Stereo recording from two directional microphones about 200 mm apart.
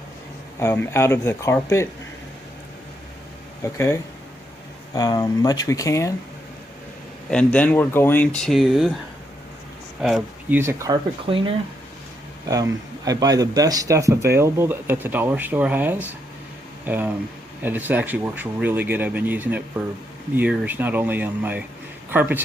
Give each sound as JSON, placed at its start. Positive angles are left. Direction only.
{"t": 0.6, "sound": "speech", "side_deg": 10}
{"t": 3.6, "sound": "speech", "side_deg": 15}
{"t": 7.3, "sound": "speech", "side_deg": 5}
{"t": 10.5, "sound": "speech", "side_deg": -10}
{"t": 11.3, "sound": "speech", "side_deg": -25}
{"t": 13.1, "sound": "speech", "side_deg": -20}